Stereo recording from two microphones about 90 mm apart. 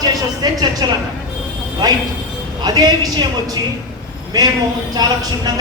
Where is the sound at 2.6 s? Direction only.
50° right (ahead or behind).